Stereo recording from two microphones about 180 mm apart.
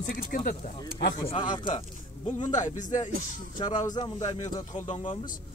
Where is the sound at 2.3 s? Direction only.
40° left (ahead or behind).